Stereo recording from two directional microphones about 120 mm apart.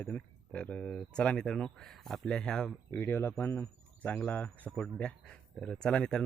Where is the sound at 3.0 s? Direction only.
20° left (ahead or behind).